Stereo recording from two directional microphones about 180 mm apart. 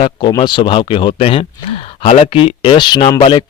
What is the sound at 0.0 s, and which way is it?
Speech, 25° left (ahead or behind).